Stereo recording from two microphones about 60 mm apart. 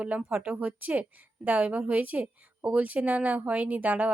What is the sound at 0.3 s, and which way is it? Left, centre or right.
Speech, right.